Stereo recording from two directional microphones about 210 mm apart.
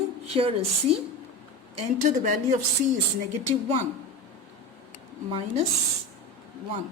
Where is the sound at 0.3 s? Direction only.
25° right (ahead or behind).